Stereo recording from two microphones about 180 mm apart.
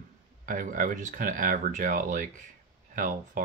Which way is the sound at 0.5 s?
50° right (ahead or behind).